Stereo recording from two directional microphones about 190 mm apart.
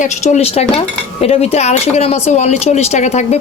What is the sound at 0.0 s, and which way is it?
Speech, 35° left (ahead or behind).